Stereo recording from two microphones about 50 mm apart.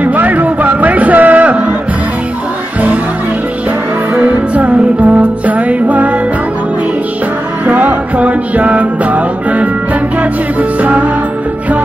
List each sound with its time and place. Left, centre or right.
0.0 s music: right
4.2 s music: right
7.6 s music: right
10.8 s music: right